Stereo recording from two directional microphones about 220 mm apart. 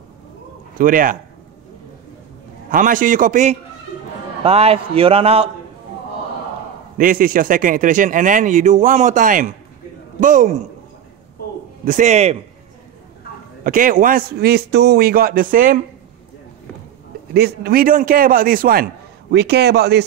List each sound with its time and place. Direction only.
0.7 s speech: 40° right (ahead or behind)
2.7 s a man's voice: 35° right (ahead or behind)
7.0 s speech: 40° right (ahead or behind)
11.8 s speech: 35° right (ahead or behind)
13.7 s speech: 40° right (ahead or behind)
17.3 s a man's voice: 45° right (ahead or behind)